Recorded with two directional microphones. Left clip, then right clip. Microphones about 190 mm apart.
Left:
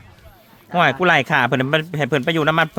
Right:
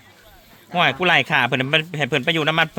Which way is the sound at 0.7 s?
25° left (ahead or behind).